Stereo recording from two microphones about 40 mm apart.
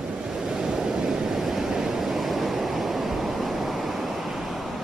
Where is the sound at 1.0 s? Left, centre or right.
Centre.